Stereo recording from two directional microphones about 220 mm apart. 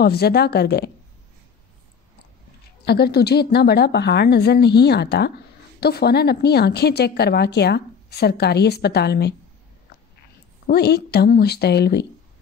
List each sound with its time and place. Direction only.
0.0 s a woman's voice: 45° left (ahead or behind)
2.8 s a woman's voice: 45° left (ahead or behind)
10.7 s a woman's voice: 45° left (ahead or behind)